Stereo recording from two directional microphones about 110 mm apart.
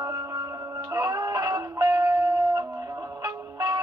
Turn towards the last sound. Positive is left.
turn(degrees=-40)  # may be behind; listen again after turning